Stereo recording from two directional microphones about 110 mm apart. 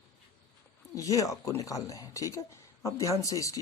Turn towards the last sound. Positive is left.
turn(degrees=30)  # may be behind; listen again after turning